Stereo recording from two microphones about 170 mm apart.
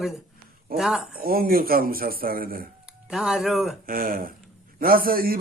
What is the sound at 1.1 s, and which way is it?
A man's voice, 60° right (ahead or behind).